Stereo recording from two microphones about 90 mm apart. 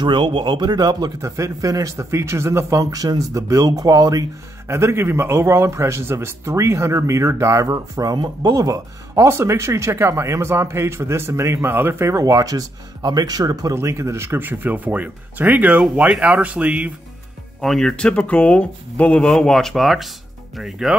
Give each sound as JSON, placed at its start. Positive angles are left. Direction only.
{"t": 0.0, "sound": "a man's voice", "side_deg": -60}
{"t": 13.7, "sound": "speech", "side_deg": -30}
{"t": 17.6, "sound": "speech", "side_deg": 5}